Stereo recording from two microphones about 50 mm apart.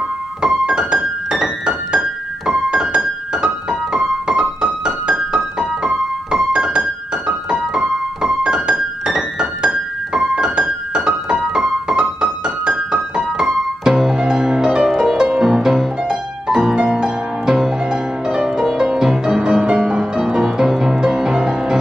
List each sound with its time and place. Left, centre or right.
0.4 s keyboard: centre
15.0 s music: centre